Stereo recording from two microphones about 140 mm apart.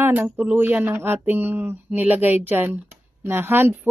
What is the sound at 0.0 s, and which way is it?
Speech, 15° right (ahead or behind).